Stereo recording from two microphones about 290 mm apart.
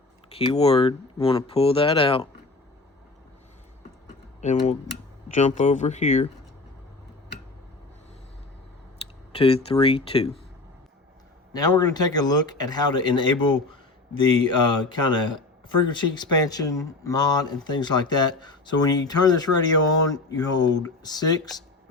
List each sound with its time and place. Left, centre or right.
0.3 s speech: centre
4.4 s speech: left
9.3 s speech: centre
11.5 s speech: centre